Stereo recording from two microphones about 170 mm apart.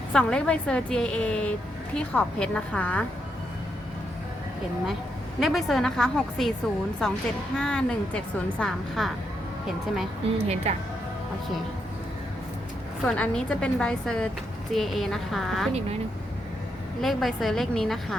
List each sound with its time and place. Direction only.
0.1 s a woman's voice: 5° left (ahead or behind)
5.4 s a woman's voice: centre (ahead or behind)
10.3 s speech: 40° right (ahead or behind)
13.1 s a woman's voice: 5° left (ahead or behind)
17.0 s a woman's voice: centre (ahead or behind)